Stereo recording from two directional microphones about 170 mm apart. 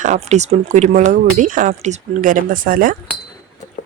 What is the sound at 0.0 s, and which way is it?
Speech, 45° right (ahead or behind).